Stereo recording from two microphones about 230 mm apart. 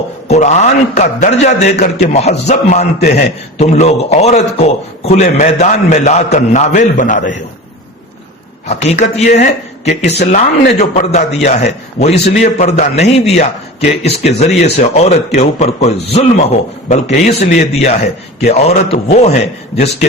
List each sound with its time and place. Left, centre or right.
0.3 s a man's voice: left
8.6 s a man's voice: left